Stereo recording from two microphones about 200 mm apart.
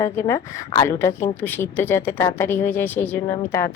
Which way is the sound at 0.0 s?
15° left (ahead or behind).